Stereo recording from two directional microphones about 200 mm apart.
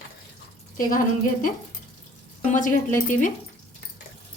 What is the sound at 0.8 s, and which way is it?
Speech, 45° left (ahead or behind).